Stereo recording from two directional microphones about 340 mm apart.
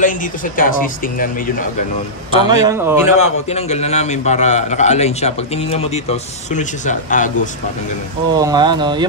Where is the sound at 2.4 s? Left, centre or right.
Centre.